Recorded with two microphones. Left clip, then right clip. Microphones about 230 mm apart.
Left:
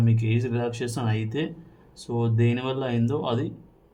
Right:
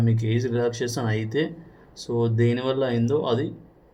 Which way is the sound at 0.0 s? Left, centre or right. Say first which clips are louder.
Right 2 dB; left.